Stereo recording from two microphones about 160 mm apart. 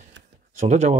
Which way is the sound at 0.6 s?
45° right (ahead or behind).